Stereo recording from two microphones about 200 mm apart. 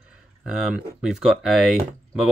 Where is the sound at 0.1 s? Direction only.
5° right (ahead or behind).